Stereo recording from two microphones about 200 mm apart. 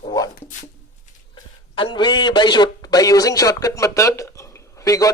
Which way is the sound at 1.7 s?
25° left (ahead or behind).